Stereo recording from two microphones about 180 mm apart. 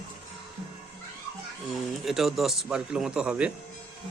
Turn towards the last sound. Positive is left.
turn(degrees=-5)  # may be behind; listen again after turning